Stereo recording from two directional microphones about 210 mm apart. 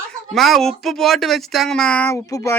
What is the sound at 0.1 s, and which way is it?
Speech, centre (ahead or behind).